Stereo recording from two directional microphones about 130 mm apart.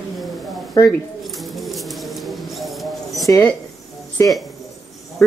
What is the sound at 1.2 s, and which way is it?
Bird, centre (ahead or behind).